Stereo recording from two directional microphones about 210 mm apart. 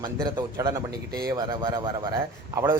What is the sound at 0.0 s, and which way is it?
A man's voice, 20° right (ahead or behind).